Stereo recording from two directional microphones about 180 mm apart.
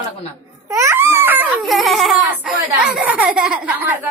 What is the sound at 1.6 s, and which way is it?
A child's voice, centre (ahead or behind).